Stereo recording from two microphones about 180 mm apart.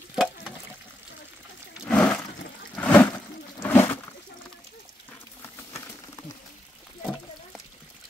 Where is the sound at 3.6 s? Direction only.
10° left (ahead or behind).